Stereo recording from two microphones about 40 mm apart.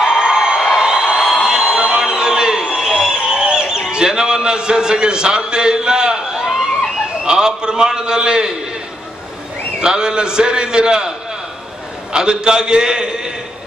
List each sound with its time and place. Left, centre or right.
0.0 s a sound: centre
7.2 s a man's voice: centre
9.8 s a man's voice: centre